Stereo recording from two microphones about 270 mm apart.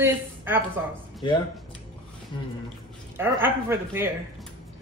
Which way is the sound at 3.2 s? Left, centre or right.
Centre.